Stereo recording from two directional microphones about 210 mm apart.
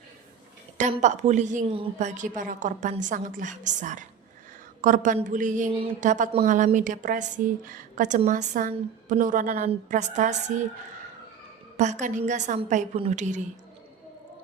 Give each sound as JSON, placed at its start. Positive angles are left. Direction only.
{"t": 0.8, "sound": "a woman's voice", "side_deg": -35}
{"t": 11.8, "sound": "a woman's voice", "side_deg": -35}